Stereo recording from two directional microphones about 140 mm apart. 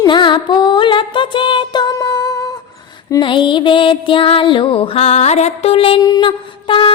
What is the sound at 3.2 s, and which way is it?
A woman's voice, 35° left (ahead or behind).